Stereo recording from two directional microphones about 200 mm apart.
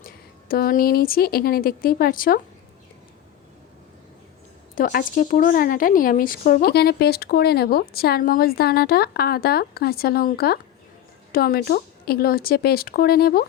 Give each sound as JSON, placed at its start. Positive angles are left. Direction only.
{"t": 0.0, "sound": "speech", "side_deg": 50}
{"t": 4.7, "sound": "speech", "side_deg": 45}